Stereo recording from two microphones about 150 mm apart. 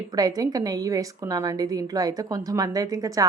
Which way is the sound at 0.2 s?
25° right (ahead or behind).